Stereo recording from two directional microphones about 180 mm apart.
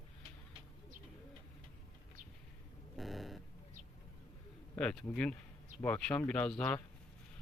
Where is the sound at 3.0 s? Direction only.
Centre (ahead or behind).